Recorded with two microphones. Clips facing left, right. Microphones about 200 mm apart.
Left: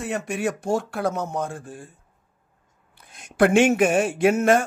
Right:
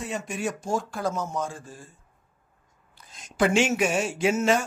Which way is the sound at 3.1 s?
60° left (ahead or behind).